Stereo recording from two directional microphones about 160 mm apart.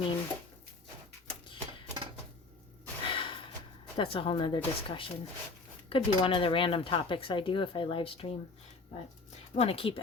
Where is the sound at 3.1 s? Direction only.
30° left (ahead or behind).